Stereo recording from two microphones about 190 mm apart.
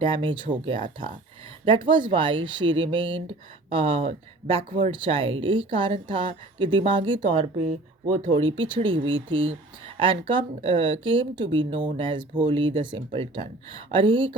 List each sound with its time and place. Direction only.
0.0 s a woman's voice: 25° right (ahead or behind)
2.6 s a sound: 80° right
2.9 s a woman's voice: 25° right (ahead or behind)
8.5 s a woman's voice: 25° right (ahead or behind)